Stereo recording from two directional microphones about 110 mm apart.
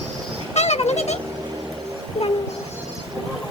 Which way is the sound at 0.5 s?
85° left.